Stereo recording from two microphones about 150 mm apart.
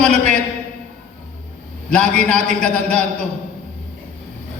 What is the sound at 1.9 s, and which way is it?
A man's voice, 5° left (ahead or behind).